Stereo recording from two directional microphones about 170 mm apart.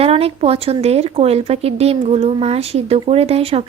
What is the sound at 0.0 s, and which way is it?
Speech, 35° right (ahead or behind).